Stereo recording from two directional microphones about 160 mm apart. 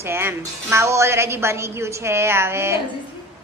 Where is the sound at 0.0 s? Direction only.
15° right (ahead or behind).